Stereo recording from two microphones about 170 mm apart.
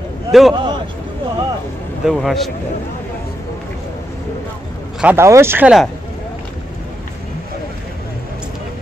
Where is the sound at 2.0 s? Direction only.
Centre (ahead or behind).